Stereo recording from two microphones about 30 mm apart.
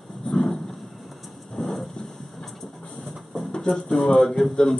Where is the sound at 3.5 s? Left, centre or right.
Centre.